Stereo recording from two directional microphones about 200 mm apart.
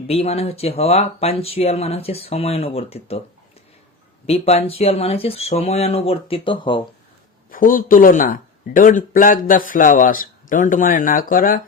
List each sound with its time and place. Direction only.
0.1 s speech: 30° left (ahead or behind)
4.3 s speech: 30° left (ahead or behind)
7.5 s speech: 45° left (ahead or behind)